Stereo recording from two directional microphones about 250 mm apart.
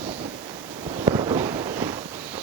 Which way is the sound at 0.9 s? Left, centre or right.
Centre.